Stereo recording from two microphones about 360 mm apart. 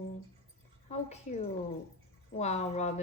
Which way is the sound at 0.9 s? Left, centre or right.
Centre.